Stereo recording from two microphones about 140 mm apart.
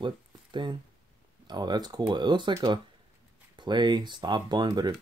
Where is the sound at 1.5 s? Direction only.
30° right (ahead or behind).